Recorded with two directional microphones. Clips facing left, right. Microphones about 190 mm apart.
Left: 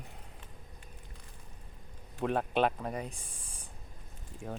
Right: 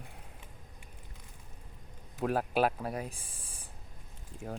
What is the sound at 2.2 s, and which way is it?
Speech, 5° right (ahead or behind).